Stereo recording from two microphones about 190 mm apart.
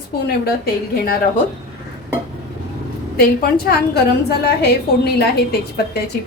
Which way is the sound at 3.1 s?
55° left (ahead or behind).